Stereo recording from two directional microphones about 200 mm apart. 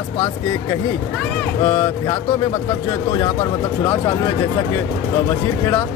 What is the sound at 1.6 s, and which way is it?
Speech, 25° left (ahead or behind).